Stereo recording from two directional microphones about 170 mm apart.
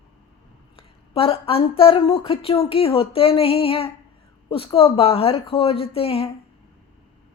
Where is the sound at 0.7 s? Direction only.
35° left (ahead or behind).